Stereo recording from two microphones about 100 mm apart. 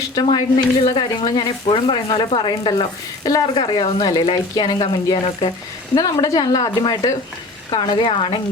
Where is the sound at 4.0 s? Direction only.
40° left (ahead or behind).